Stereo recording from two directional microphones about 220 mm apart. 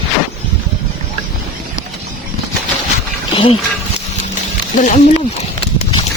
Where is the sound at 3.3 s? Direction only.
25° left (ahead or behind).